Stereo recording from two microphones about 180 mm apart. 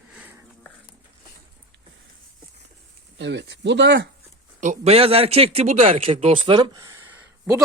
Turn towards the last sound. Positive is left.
turn(degrees=-15)  # may be behind; listen again after turning